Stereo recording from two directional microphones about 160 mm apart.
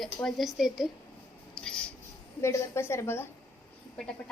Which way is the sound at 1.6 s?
5° left (ahead or behind).